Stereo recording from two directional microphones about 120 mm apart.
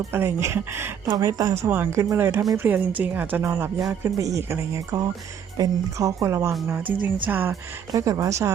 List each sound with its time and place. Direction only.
0.1 s speech: 20° right (ahead or behind)
6.7 s speech: 15° right (ahead or behind)
7.9 s speech: 30° right (ahead or behind)